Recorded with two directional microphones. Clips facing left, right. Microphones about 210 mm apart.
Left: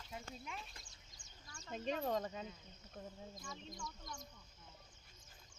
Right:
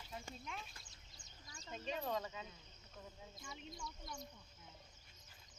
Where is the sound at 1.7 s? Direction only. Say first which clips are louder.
Left 3 dB; 45° left (ahead or behind).